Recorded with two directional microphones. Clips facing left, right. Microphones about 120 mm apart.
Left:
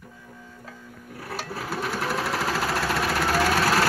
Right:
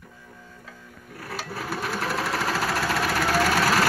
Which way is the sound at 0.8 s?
10° left (ahead or behind).